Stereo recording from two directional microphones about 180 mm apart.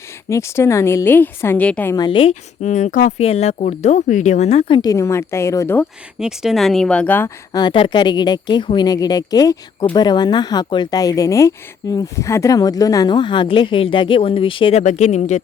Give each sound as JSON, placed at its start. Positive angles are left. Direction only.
{"t": 0.3, "sound": "a woman's voice", "side_deg": 15}
{"t": 2.0, "sound": "speech", "side_deg": 30}
{"t": 2.3, "sound": "speech", "side_deg": 40}
{"t": 6.1, "sound": "speech", "side_deg": -5}
{"t": 7.5, "sound": "speech", "side_deg": 25}